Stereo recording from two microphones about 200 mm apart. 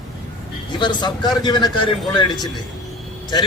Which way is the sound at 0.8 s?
20° left (ahead or behind).